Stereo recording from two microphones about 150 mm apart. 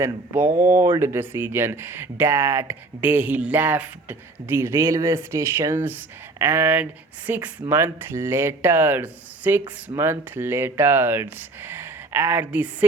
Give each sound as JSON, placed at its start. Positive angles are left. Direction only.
{"t": 0.0, "sound": "speech", "side_deg": -15}